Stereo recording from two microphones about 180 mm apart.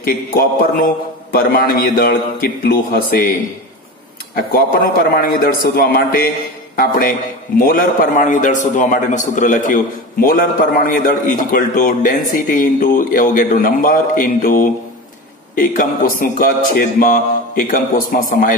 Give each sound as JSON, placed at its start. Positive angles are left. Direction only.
{"t": 0.0, "sound": "a man's voice", "side_deg": 55}
{"t": 4.4, "sound": "a man's voice", "side_deg": 55}